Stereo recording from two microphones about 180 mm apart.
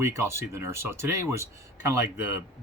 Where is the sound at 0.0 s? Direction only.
15° right (ahead or behind).